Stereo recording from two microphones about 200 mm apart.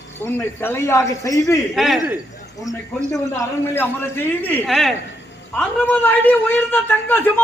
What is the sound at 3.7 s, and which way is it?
A man's voice, 10° left (ahead or behind).